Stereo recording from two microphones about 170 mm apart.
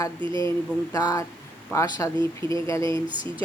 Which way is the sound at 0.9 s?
20° left (ahead or behind).